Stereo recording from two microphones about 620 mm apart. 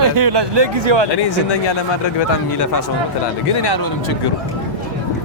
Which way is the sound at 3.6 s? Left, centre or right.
Left.